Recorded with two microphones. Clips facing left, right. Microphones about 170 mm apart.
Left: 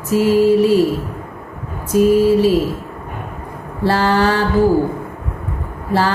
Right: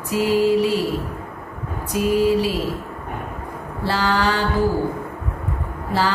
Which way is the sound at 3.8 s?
45° left (ahead or behind).